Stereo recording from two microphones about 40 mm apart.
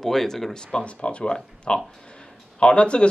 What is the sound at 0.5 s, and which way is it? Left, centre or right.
Speech, left.